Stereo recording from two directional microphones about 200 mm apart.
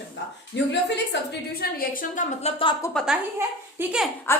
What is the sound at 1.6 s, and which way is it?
Speech, 40° left (ahead or behind).